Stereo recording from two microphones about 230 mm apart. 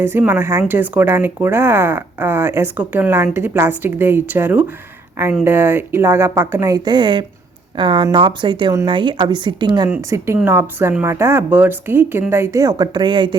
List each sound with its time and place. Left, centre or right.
0.0 s speech: centre